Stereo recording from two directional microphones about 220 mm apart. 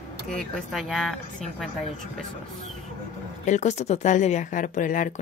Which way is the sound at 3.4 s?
35° left (ahead or behind).